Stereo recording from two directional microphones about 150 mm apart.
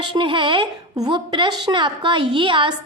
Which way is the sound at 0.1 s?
35° right (ahead or behind).